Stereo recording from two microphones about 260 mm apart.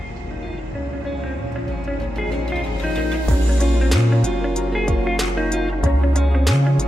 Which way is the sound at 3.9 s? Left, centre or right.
Centre.